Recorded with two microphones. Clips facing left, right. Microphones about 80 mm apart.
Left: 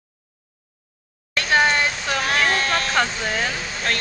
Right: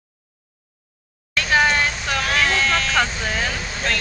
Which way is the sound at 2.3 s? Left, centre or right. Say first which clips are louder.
Right 1 dB; left.